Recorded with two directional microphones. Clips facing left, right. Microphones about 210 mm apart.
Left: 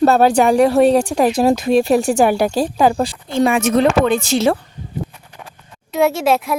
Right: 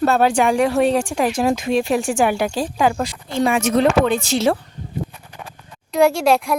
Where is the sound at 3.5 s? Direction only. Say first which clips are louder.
Left 1 dB; 55° left (ahead or behind).